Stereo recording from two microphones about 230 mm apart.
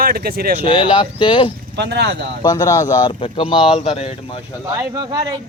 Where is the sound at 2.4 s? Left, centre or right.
Centre.